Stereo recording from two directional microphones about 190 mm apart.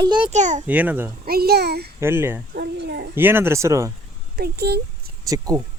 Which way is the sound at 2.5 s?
60° right (ahead or behind).